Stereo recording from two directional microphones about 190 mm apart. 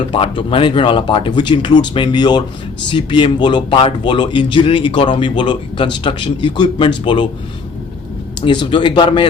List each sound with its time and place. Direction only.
0.1 s speech: 30° left (ahead or behind)
8.4 s speech: 25° left (ahead or behind)